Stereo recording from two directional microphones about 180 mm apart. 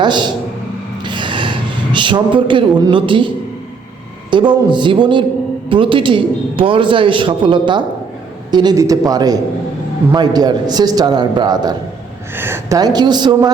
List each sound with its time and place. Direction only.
0.0 s a man's voice: 25° right (ahead or behind)
1.0 s gasp: 25° right (ahead or behind)
4.3 s a man's voice: 25° right (ahead or behind)